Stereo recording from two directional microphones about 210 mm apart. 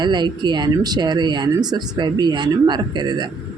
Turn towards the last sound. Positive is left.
turn(degrees=-20)  # may be behind; listen again after turning